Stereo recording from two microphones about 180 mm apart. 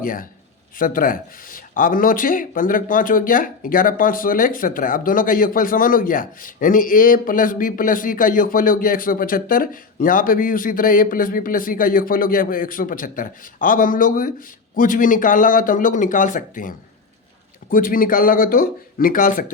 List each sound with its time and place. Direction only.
0.0 s speech: 50° left (ahead or behind)